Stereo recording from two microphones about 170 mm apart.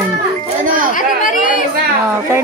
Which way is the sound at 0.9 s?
50° left (ahead or behind).